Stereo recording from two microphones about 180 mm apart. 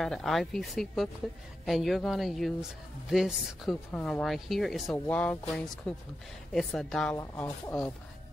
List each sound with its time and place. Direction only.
0.0 s speech: centre (ahead or behind)
4.9 s speech: 10° left (ahead or behind)
7.2 s speech: 15° left (ahead or behind)